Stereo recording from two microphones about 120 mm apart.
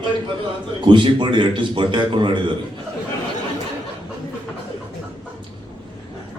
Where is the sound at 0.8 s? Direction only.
40° right (ahead or behind).